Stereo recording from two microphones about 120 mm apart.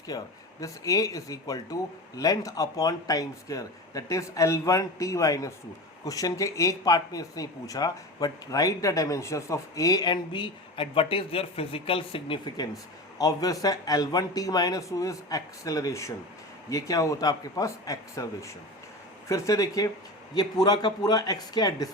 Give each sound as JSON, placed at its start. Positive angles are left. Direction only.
{"t": 0.1, "sound": "speech", "side_deg": 30}
{"t": 12.5, "sound": "speech", "side_deg": 30}